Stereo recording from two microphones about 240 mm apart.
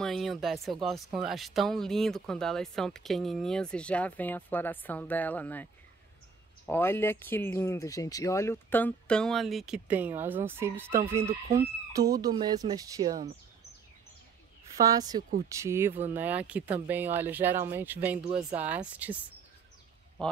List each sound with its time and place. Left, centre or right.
0.0 s speech: centre
14.8 s speech: centre